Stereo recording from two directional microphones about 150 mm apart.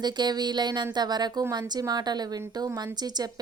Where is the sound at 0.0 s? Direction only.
30° right (ahead or behind).